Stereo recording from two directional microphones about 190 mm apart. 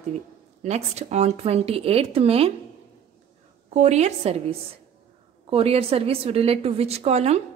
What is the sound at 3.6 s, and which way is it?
A woman's voice, 35° right (ahead or behind).